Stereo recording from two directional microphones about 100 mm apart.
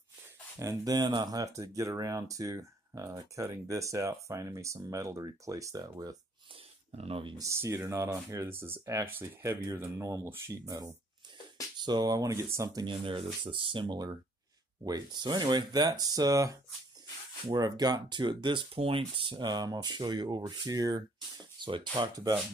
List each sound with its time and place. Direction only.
0.6 s speech: 35° right (ahead or behind)
7.0 s speech: 70° right (ahead or behind)
7.3 s speech: 30° right (ahead or behind)
12.8 s speech: 60° right (ahead or behind)
14.9 s speech: 45° right (ahead or behind)
18.8 s speech: 65° right (ahead or behind); by 21.0 s 40° right (ahead or behind)
21.5 s speech: 50° right (ahead or behind)